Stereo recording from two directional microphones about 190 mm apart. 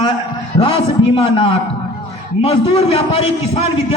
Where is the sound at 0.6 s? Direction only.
30° left (ahead or behind).